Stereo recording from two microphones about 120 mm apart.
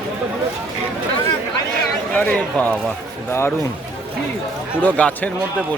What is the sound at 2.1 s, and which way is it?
Speech, 15° left (ahead or behind).